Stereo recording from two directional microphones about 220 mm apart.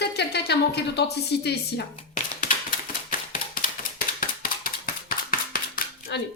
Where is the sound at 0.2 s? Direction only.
50° left (ahead or behind).